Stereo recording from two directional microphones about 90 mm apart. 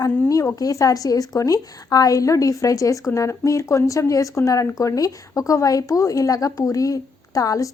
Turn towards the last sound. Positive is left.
turn(degrees=40)  # may be behind; listen again after turning